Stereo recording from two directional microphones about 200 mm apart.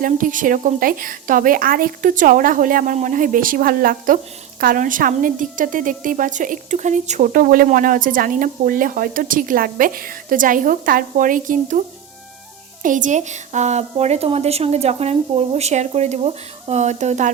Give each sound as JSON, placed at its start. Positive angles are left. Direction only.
{"t": 0.0, "sound": "speech", "side_deg": -40}
{"t": 12.8, "sound": "a woman's voice", "side_deg": -40}